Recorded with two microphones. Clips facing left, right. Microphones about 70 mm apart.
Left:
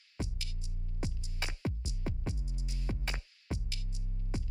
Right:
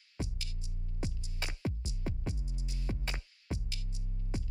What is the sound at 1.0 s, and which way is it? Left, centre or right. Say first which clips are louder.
Music: even; left.